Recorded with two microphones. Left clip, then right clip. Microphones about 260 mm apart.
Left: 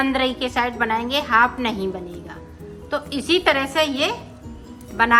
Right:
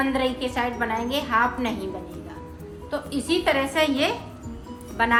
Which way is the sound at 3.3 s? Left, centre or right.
Centre.